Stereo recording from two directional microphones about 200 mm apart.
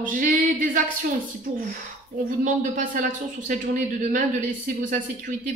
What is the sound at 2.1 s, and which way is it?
Speech, 40° right (ahead or behind).